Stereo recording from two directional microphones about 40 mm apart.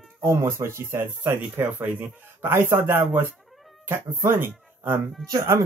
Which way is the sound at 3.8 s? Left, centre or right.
Right.